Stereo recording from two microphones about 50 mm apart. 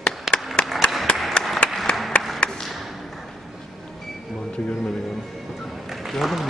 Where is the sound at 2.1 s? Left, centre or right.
Left.